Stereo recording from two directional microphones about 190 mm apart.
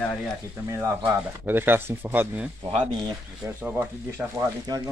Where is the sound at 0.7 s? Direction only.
15° right (ahead or behind).